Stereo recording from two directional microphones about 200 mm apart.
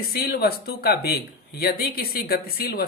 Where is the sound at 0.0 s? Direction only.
50° left (ahead or behind).